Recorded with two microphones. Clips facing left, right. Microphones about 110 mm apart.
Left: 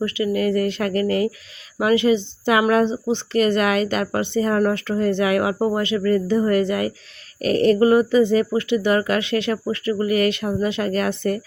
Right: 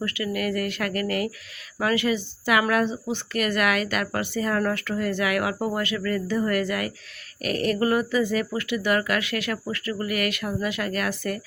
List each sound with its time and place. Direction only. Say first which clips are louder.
0.0 s speech: left 7 dB; 20° left (ahead or behind)